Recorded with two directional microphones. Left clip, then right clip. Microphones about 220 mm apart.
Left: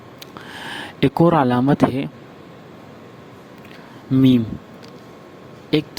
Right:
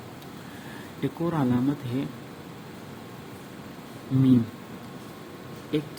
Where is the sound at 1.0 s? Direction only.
45° left (ahead or behind).